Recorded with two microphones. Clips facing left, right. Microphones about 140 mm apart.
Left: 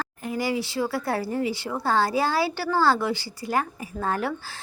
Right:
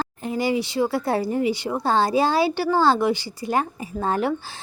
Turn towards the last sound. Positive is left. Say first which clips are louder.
# right 4 dB
turn(degrees=-20)  # may be behind; listen again after turning